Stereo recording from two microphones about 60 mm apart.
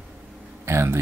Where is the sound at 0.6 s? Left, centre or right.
Right.